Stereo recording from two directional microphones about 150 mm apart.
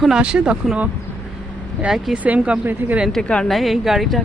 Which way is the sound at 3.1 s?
5° left (ahead or behind).